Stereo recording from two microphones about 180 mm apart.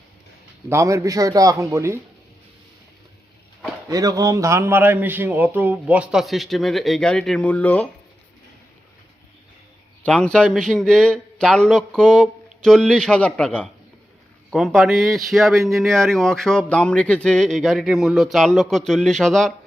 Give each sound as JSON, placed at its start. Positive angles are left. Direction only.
{"t": 0.7, "sound": "a man's voice", "side_deg": -15}
{"t": 3.8, "sound": "a man's voice", "side_deg": -20}
{"t": 10.0, "sound": "speech", "side_deg": 5}